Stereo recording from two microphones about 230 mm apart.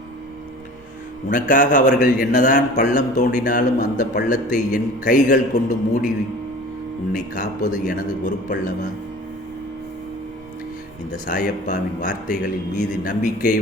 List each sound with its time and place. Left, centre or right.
1.3 s a man's voice: left
7.1 s a man's voice: left
11.3 s a man's voice: left